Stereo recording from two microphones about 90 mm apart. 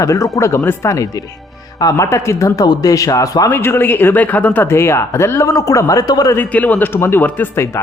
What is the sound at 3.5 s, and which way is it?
Speech, 25° left (ahead or behind).